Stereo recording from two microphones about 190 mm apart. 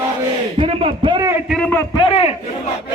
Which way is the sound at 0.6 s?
30° right (ahead or behind).